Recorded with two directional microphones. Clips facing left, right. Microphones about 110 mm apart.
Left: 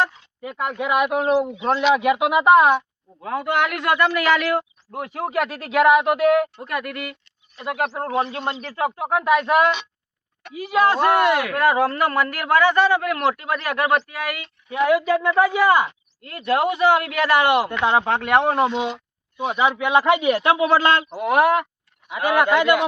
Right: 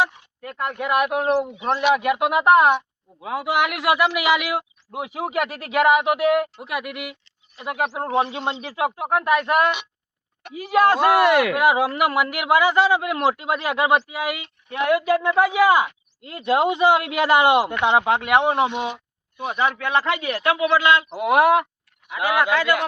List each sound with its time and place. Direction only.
0.4 s a man's voice: 5° left (ahead or behind)
8.0 s a man's voice: 20° right (ahead or behind)
8.6 s speech: 5° right (ahead or behind)
10.5 s speech: 50° right (ahead or behind)
10.9 s a man's voice: 5° right (ahead or behind)
14.8 s a man's voice: 5° right (ahead or behind)
18.9 s a sound: 5° right (ahead or behind)
19.5 s a man's voice: 15° left (ahead or behind); by 21.1 s 40° left (ahead or behind)
21.2 s a man's voice: 10° right (ahead or behind)
22.1 s a man's voice: 15° left (ahead or behind)